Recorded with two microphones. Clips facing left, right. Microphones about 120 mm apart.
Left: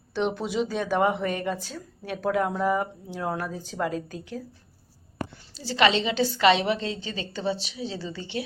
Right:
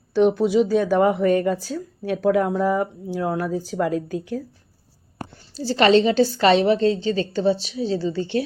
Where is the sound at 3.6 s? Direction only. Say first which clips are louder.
Right 6 dB; 25° left (ahead or behind).